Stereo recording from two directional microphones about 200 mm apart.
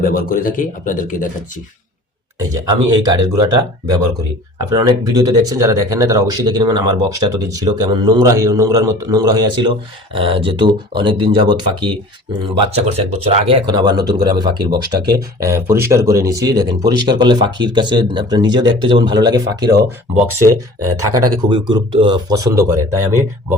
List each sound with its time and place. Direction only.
0.0 s speech: 45° left (ahead or behind)
2.4 s speech: 20° right (ahead or behind)
21.4 s speech: 25° right (ahead or behind)